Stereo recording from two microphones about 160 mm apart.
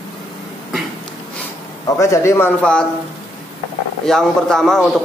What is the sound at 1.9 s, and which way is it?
Speech, 20° left (ahead or behind).